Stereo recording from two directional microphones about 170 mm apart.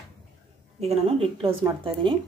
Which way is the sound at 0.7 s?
35° right (ahead or behind).